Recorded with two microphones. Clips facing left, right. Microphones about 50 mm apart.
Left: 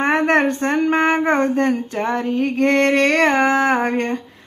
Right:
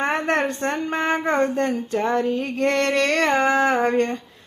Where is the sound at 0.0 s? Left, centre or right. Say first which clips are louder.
Left 5 dB; left.